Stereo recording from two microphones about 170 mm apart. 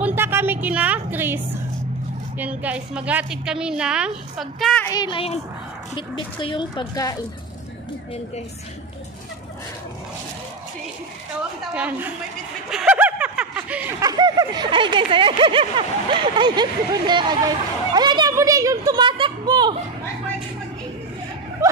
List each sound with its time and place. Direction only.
0.0 s a woman's voice: 10° right (ahead or behind)
4.8 s speech: 25° left (ahead or behind)
11.7 s a woman's voice: 10° right (ahead or behind)
12.6 s snicker: 5° right (ahead or behind)
13.9 s speech: 20° right (ahead or behind)